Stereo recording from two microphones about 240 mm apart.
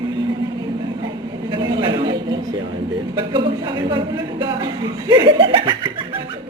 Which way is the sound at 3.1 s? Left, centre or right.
Centre.